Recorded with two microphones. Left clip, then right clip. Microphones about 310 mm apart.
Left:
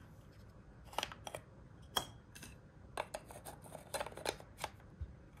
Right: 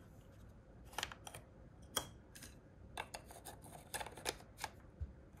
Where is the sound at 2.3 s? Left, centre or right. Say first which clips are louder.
Left 2 dB; centre.